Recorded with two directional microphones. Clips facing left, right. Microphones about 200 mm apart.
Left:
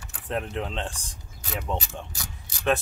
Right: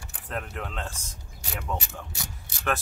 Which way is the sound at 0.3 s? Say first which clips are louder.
Left 5 dB; 25° left (ahead or behind).